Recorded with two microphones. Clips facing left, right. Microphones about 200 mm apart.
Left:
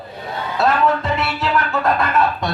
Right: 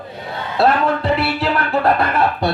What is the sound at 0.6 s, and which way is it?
Music, 35° right (ahead or behind).